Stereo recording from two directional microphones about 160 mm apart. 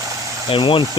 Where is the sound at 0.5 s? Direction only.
30° left (ahead or behind).